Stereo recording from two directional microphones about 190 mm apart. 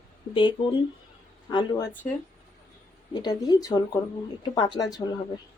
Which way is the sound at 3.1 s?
20° left (ahead or behind).